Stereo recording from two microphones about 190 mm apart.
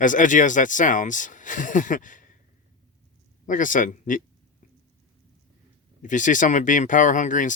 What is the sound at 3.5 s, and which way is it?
Speech, 45° left (ahead or behind).